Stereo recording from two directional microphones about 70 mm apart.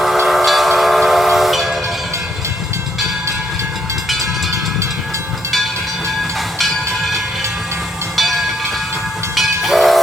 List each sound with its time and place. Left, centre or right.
0.0 s train: centre
4.2 s train: right
6.6 s train: centre